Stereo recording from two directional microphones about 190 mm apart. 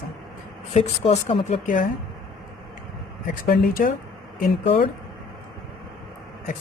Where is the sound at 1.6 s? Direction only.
45° left (ahead or behind).